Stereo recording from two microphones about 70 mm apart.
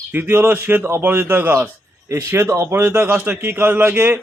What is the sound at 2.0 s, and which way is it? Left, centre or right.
A man's voice, right.